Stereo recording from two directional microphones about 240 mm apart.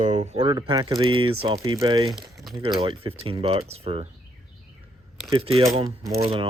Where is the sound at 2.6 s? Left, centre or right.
Right.